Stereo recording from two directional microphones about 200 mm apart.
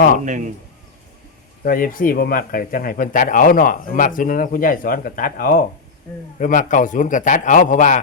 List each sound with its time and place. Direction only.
1.6 s a man's voice: 45° left (ahead or behind)